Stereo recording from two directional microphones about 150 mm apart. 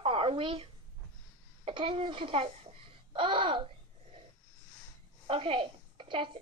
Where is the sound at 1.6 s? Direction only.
35° right (ahead or behind).